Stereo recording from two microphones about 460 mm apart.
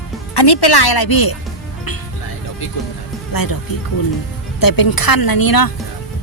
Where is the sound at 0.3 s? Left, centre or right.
Left.